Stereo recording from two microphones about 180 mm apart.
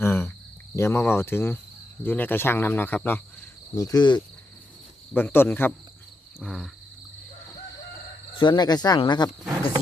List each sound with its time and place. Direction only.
0.0 s cricket: 10° left (ahead or behind)
0.8 s speech: 15° left (ahead or behind)
3.8 s speech: 20° left (ahead or behind)
5.1 s speech: 10° left (ahead or behind)
6.4 s wild animals: centre (ahead or behind)
8.4 s speech: 25° left (ahead or behind)